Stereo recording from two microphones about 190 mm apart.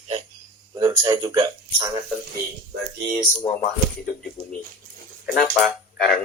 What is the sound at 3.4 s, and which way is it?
Speech, 35° left (ahead or behind).